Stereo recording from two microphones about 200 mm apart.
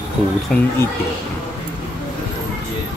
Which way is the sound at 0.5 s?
5° left (ahead or behind).